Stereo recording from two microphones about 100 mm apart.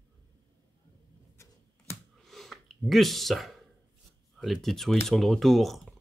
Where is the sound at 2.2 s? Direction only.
Centre (ahead or behind).